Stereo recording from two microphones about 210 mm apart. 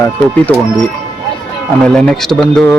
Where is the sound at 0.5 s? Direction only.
5° left (ahead or behind).